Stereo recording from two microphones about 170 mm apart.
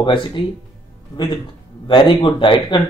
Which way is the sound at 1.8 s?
30° left (ahead or behind).